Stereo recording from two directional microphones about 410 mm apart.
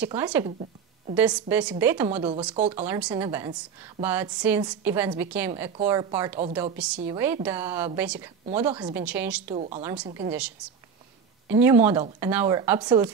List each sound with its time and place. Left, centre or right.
0.0 s speech: centre
0.5 s a sound: centre
1.1 s a woman's voice: centre
9.6 s speech: centre